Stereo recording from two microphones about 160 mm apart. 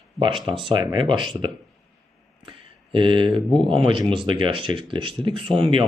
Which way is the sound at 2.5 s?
30° right (ahead or behind).